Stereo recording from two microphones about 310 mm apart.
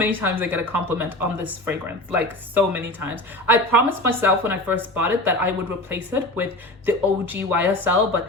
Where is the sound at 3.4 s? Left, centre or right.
Centre.